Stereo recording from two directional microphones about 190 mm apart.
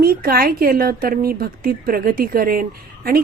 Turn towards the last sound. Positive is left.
turn(degrees=-50)  # may be behind; listen again after turning